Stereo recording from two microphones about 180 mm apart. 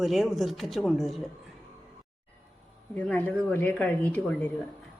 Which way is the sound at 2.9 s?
5° left (ahead or behind).